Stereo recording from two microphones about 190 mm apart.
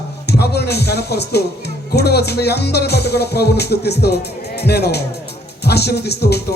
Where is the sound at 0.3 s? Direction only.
60° left (ahead or behind).